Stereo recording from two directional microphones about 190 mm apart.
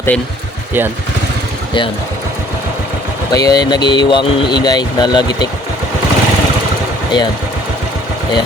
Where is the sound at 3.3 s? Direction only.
20° left (ahead or behind).